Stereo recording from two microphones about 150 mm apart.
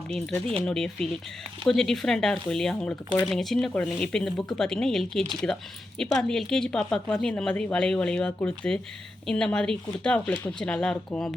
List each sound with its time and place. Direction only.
0.1 s a woman's voice: 5° left (ahead or behind)